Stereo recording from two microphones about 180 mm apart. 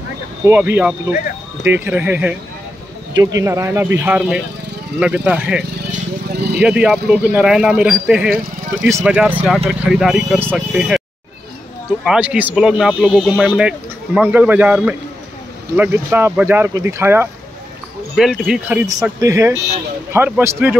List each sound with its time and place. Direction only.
0.5 s speech: 10° right (ahead or behind)
3.3 s speech: 15° right (ahead or behind)
6.3 s vehicle: 65° right (ahead or behind)
6.6 s speech: 5° right (ahead or behind)
12.0 s speech: 5° right (ahead or behind)
18.1 s speech: centre (ahead or behind)